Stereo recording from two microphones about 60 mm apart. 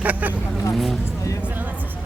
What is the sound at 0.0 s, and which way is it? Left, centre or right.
Speech, right.